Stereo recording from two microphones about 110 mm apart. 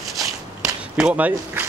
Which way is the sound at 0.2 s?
30° right (ahead or behind).